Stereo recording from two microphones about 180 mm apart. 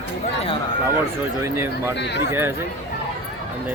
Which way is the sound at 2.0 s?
70° left (ahead or behind).